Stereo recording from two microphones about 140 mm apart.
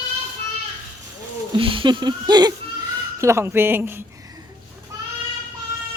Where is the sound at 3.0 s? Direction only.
20° right (ahead or behind).